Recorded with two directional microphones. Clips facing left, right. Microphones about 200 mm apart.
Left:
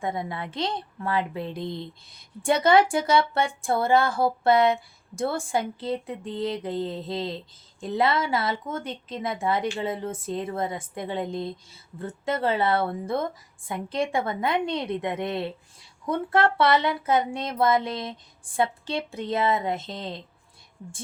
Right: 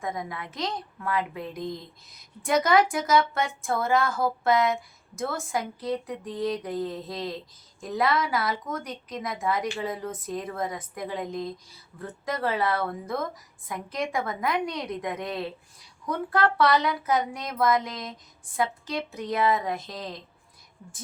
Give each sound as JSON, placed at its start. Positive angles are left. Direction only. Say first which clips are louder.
{"t": 0.0, "sound": "speech", "louder": "left 3 dB", "side_deg": 30}